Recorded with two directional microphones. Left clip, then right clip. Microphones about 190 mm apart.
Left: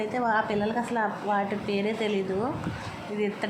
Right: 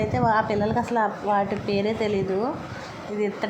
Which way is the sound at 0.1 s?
10° right (ahead or behind).